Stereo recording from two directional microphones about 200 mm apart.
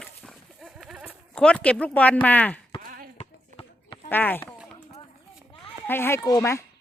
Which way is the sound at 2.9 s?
45° right (ahead or behind).